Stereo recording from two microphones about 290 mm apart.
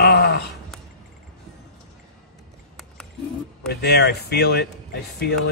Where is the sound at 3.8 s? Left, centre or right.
Left.